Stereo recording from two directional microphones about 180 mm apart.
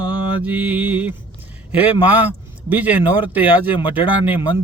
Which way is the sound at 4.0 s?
25° left (ahead or behind).